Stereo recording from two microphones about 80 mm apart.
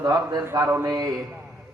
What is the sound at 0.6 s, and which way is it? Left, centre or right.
Speech, right.